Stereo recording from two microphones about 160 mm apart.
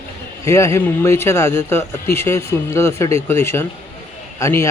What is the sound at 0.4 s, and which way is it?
A man's voice, 20° left (ahead or behind).